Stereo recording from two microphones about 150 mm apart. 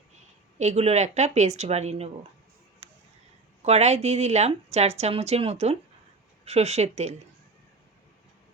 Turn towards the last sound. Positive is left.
turn(degrees=-45)  # may be behind; listen again after turning